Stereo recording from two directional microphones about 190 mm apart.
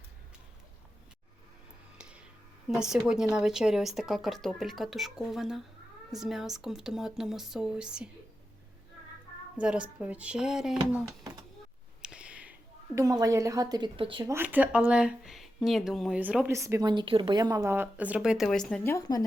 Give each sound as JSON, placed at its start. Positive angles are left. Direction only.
{"t": 2.0, "sound": "music", "side_deg": -5}
{"t": 2.6, "sound": "a woman's voice", "side_deg": -5}
{"t": 9.6, "sound": "a woman's voice", "side_deg": -5}
{"t": 12.0, "sound": "a sound", "side_deg": -5}
{"t": 13.0, "sound": "a woman's voice", "side_deg": -20}
{"t": 14.3, "sound": "a woman's voice", "side_deg": -10}
{"t": 18.9, "sound": "a woman's voice", "side_deg": 20}